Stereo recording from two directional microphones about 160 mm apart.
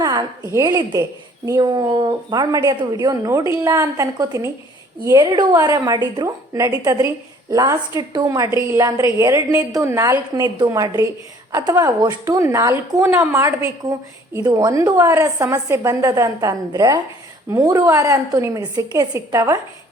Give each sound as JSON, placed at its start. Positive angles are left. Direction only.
{"t": 0.0, "sound": "a woman's voice", "side_deg": -20}